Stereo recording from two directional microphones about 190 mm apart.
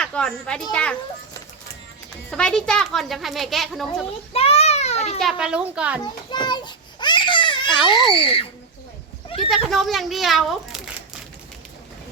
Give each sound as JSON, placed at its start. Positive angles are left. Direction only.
{"t": 0.0, "sound": "a child's voice", "side_deg": 5}
{"t": 2.3, "sound": "speech", "side_deg": 5}
{"t": 4.3, "sound": "a sound", "side_deg": 30}
{"t": 5.2, "sound": "speech", "side_deg": -5}
{"t": 6.3, "sound": "a sound", "side_deg": 25}
{"t": 8.0, "sound": "a child's voice", "side_deg": 30}
{"t": 9.4, "sound": "a child's voice", "side_deg": 0}